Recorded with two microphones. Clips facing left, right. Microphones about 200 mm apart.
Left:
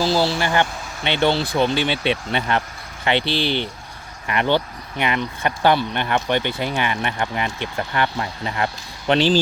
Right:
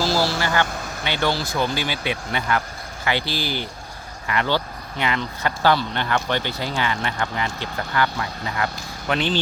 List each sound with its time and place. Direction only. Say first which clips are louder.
0.0 s speech: left 2 dB; 60° left (ahead or behind)
0.3 s speech: left 2 dB; 20° left (ahead or behind)
4.3 s speech: left 3 dB; 20° left (ahead or behind)